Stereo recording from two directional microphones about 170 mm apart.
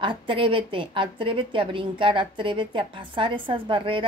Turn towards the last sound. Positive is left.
turn(degrees=-30)  # may be behind; listen again after turning